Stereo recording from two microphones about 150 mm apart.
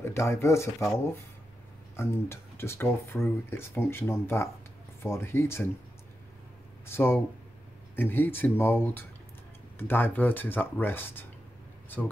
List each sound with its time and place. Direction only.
0.0 s speech: 15° left (ahead or behind)
2.0 s speech: 15° left (ahead or behind)
6.9 s speech: 15° left (ahead or behind)